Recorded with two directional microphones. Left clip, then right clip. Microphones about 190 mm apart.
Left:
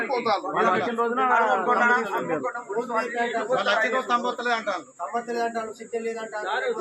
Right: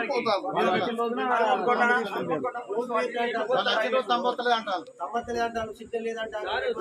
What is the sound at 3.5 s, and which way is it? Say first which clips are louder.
A man's voice: left 2 dB; 25° left (ahead or behind).